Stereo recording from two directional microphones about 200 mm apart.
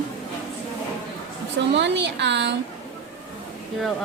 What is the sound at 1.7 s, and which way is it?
Speech, 60° right (ahead or behind).